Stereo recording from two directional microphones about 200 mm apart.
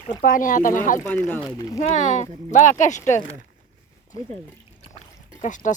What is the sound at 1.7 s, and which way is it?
Speech, 35° left (ahead or behind).